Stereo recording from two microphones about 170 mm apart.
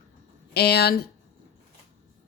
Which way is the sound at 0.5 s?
70° left (ahead or behind).